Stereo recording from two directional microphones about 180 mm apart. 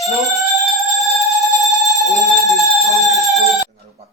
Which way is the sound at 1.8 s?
Centre (ahead or behind).